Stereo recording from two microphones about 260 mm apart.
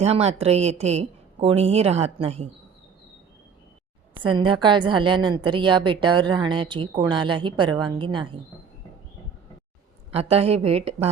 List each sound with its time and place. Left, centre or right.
0.0 s a woman's voice: right
4.1 s a woman's voice: centre
10.1 s a woman's voice: right